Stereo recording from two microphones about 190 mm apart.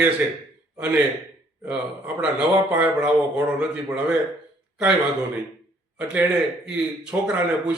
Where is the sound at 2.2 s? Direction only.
5° right (ahead or behind).